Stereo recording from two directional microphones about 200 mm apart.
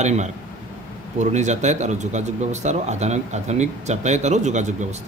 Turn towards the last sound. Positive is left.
turn(degrees=-35)  # may be behind; listen again after turning